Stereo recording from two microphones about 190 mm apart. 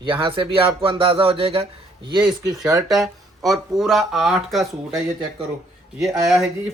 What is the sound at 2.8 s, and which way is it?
Speech, centre (ahead or behind).